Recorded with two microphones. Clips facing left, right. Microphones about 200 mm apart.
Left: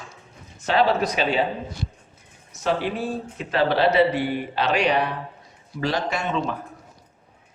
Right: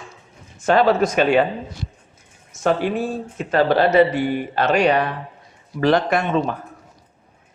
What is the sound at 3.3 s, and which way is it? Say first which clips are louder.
Speech: right 5 dB; 45° right (ahead or behind).